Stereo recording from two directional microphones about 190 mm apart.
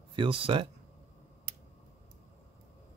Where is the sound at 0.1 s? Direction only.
25° right (ahead or behind).